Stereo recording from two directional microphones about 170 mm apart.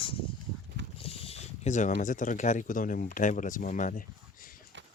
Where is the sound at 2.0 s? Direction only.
50° left (ahead or behind).